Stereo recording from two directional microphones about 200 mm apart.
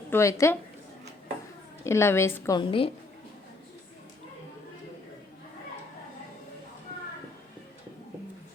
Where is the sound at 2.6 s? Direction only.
25° left (ahead or behind).